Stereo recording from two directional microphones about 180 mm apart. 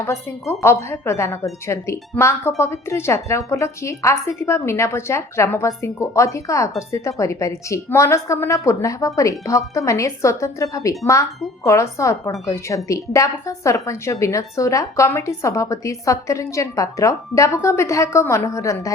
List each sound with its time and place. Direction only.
0.0 s a woman's voice: 10° left (ahead or behind)